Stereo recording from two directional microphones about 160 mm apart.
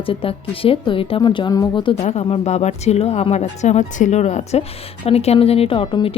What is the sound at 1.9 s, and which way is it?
Speech, 45° left (ahead or behind).